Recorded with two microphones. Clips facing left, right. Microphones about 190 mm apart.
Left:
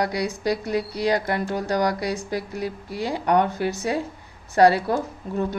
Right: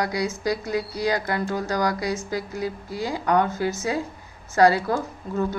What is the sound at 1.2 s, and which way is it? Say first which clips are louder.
Speech: left 1 dB; 25° left (ahead or behind).